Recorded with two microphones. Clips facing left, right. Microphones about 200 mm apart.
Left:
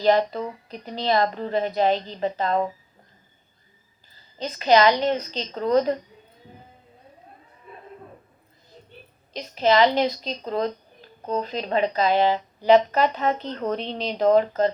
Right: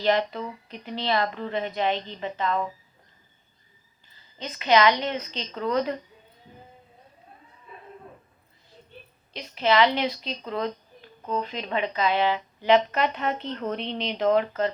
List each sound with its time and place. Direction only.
0.0 s a woman's voice: 35° left (ahead or behind)
4.4 s a woman's voice: 35° left (ahead or behind)
9.3 s a woman's voice: 40° left (ahead or behind)